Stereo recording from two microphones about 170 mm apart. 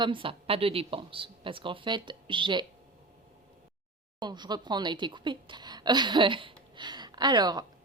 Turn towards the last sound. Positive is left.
turn(degrees=-25)  # may be behind; listen again after turning